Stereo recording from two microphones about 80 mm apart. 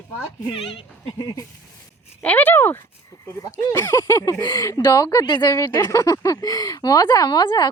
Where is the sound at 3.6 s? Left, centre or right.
Left.